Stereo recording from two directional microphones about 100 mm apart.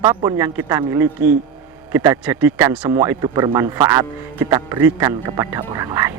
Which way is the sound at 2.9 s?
35° right (ahead or behind).